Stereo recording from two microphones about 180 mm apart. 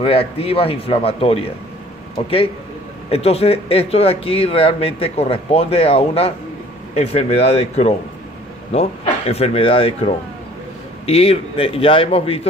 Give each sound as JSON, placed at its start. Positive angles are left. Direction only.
{"t": 0.0, "sound": "speech", "side_deg": 30}